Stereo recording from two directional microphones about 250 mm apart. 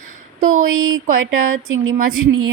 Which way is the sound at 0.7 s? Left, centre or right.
Right.